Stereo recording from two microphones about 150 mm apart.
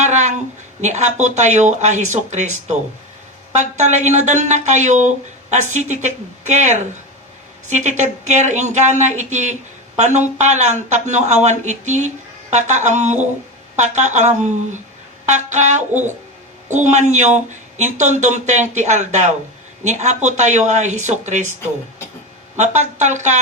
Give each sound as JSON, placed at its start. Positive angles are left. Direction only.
{"t": 0.0, "sound": "a sound", "side_deg": -50}
{"t": 0.8, "sound": "speech", "side_deg": -50}
{"t": 22.5, "sound": "speech", "side_deg": -50}